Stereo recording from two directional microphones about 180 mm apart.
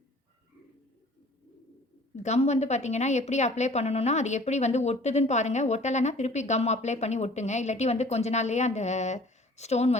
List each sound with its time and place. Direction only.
2.1 s a woman's voice: 40° left (ahead or behind)